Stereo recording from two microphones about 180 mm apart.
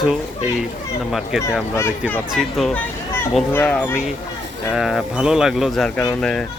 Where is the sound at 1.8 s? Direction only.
10° left (ahead or behind).